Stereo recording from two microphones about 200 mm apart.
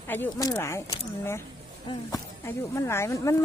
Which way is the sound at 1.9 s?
15° left (ahead or behind).